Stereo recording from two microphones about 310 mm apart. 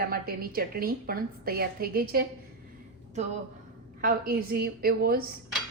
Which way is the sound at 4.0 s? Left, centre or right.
Right.